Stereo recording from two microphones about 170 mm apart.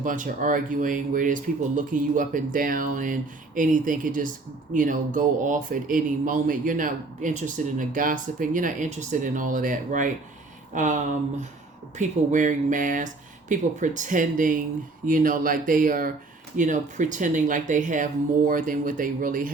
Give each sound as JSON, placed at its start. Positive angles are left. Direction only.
{"t": 0.0, "sound": "speech", "side_deg": -50}